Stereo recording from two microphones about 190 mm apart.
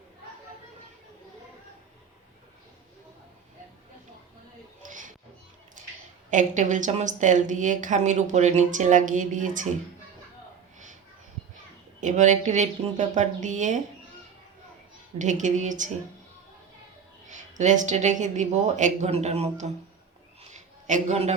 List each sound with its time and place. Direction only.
4.9 s a sound: 45° right (ahead or behind)
6.3 s a woman's voice: 40° right (ahead or behind)
11.9 s a woman's voice: 40° right (ahead or behind)
15.2 s a woman's voice: 40° right (ahead or behind)
17.2 s a woman's voice: 40° right (ahead or behind)
20.5 s a sound: 40° right (ahead or behind)